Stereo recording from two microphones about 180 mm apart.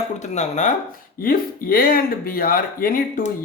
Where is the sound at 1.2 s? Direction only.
55° left (ahead or behind).